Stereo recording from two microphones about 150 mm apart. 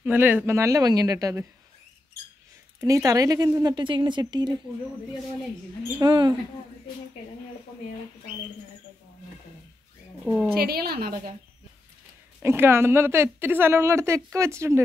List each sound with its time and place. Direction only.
0.0 s speech: 15° right (ahead or behind)
2.8 s speech: 20° right (ahead or behind)
5.9 s speech: 30° right (ahead or behind)
10.5 s a woman's voice: 90° right
12.4 s a woman's voice: 15° right (ahead or behind)